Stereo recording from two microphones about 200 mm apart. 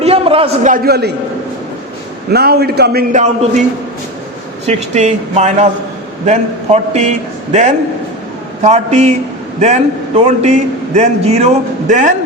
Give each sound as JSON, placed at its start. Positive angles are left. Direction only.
{"t": 0.0, "sound": "a man's voice", "side_deg": -30}
{"t": 2.3, "sound": "a man's voice", "side_deg": -55}
{"t": 4.6, "sound": "a man's voice", "side_deg": -35}